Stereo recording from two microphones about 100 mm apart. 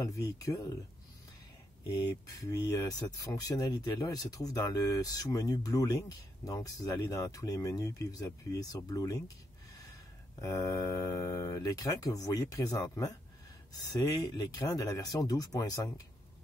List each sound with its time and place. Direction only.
0.0 s speech: 35° left (ahead or behind)
1.9 s speech: 35° left (ahead or behind)
10.4 s speech: 35° left (ahead or behind)
14.3 s speech: 35° left (ahead or behind)